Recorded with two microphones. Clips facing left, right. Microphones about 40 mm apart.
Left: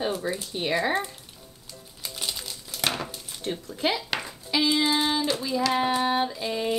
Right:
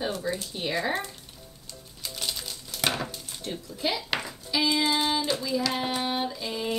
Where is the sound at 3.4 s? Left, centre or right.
Left.